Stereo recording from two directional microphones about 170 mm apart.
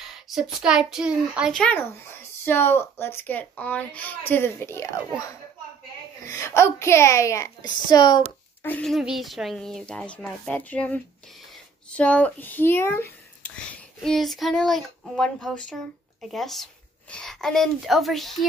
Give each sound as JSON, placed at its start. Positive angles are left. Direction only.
{"t": 0.3, "sound": "a child's voice", "side_deg": 0}
{"t": 6.2, "sound": "a child's voice", "side_deg": 20}
{"t": 8.6, "sound": "a child's voice", "side_deg": 5}
{"t": 14.0, "sound": "speech", "side_deg": 0}